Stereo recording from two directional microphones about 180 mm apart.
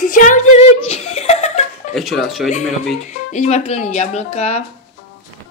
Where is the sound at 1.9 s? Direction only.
Centre (ahead or behind).